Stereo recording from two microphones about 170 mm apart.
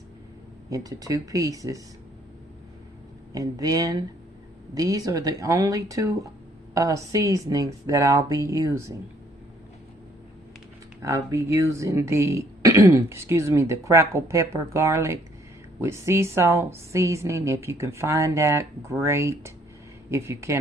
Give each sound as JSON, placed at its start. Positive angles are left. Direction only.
{"t": 0.7, "sound": "speech", "side_deg": -20}
{"t": 3.3, "sound": "speech", "side_deg": -20}
{"t": 11.0, "sound": "speech", "side_deg": -15}